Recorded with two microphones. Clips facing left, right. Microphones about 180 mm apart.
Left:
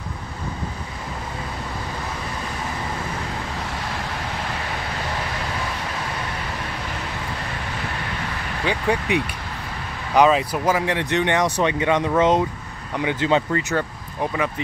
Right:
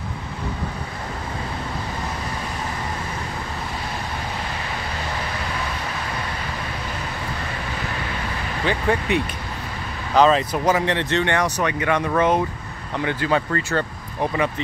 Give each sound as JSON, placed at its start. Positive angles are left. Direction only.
{"t": 8.6, "sound": "speech", "side_deg": 10}
{"t": 14.2, "sound": "speech", "side_deg": 0}